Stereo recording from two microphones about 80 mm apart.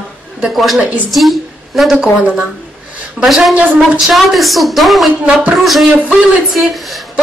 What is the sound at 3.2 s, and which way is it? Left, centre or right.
Speech, centre.